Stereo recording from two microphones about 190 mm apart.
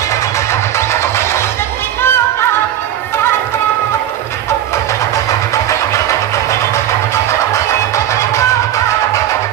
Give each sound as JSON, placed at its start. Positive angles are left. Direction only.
{"t": 0.3, "sound": "music", "side_deg": 15}
{"t": 5.6, "sound": "vehicle", "side_deg": 15}
{"t": 7.3, "sound": "music", "side_deg": 15}